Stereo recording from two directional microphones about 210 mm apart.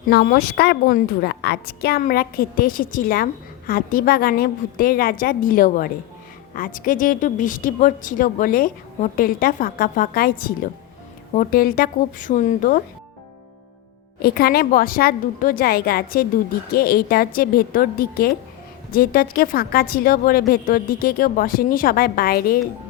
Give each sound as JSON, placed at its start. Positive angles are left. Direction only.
{"t": 0.1, "sound": "a woman's voice", "side_deg": 45}
{"t": 14.2, "sound": "a woman's voice", "side_deg": 45}